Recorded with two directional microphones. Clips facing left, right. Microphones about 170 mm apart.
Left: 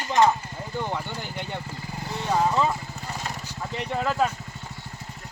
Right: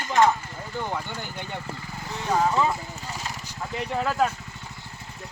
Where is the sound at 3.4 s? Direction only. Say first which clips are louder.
Even; 10° right (ahead or behind).